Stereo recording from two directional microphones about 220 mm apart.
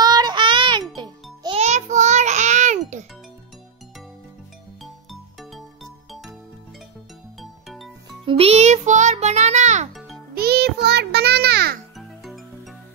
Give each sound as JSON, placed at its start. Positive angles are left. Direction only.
{"t": 0.0, "sound": "music", "side_deg": -20}
{"t": 7.3, "sound": "music", "side_deg": 0}
{"t": 8.3, "sound": "music", "side_deg": -25}
{"t": 10.3, "sound": "music", "side_deg": -45}
{"t": 12.0, "sound": "music", "side_deg": 0}